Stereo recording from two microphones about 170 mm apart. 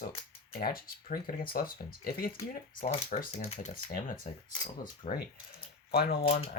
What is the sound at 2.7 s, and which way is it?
Speech, 40° left (ahead or behind).